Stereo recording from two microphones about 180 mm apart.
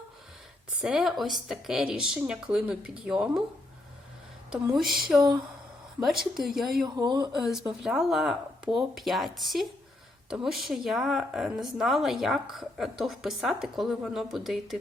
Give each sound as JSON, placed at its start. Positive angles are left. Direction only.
{"t": 0.8, "sound": "a woman's voice", "side_deg": 0}
{"t": 4.7, "sound": "a woman's voice", "side_deg": 0}
{"t": 6.3, "sound": "a woman's voice", "side_deg": 0}
{"t": 6.8, "sound": "speech", "side_deg": -20}
{"t": 7.3, "sound": "a woman's voice", "side_deg": 0}